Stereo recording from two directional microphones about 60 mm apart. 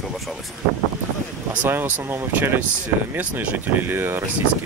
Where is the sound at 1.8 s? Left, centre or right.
Right.